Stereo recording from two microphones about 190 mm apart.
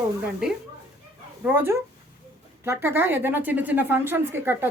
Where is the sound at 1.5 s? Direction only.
10° right (ahead or behind).